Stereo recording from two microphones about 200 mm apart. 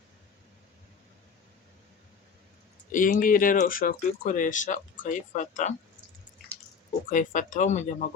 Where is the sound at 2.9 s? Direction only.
40° left (ahead or behind).